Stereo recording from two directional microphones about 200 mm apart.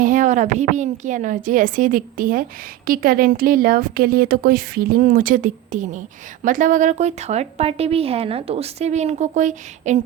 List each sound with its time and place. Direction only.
0.0 s a woman's voice: 40° right (ahead or behind)